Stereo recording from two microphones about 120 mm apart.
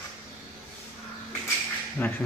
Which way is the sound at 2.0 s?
15° left (ahead or behind).